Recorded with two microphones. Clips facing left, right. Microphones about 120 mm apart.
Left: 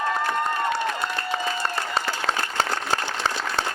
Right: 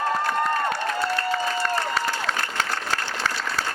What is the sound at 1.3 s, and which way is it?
Applause, 25° left (ahead or behind).